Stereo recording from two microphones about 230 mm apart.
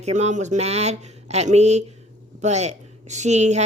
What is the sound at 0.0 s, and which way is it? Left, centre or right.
A woman's voice, right.